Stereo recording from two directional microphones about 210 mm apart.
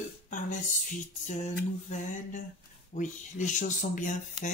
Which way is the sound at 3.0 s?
35° left (ahead or behind).